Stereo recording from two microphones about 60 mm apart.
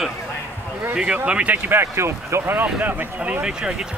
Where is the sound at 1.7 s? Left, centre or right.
Right.